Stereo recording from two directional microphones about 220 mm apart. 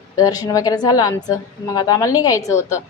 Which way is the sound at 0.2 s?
15° left (ahead or behind).